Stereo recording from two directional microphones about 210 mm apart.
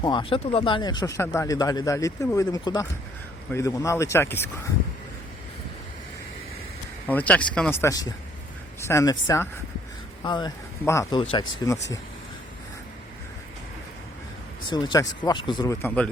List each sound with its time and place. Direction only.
0.0 s speech: 20° left (ahead or behind)
7.1 s speech: 5° left (ahead or behind)
14.7 s speech: 20° left (ahead or behind)